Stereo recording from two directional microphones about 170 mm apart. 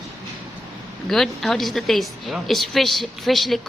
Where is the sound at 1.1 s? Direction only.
Centre (ahead or behind).